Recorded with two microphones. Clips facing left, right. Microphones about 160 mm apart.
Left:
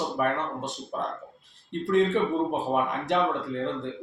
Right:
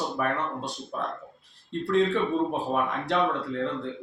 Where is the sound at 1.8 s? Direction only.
20° left (ahead or behind).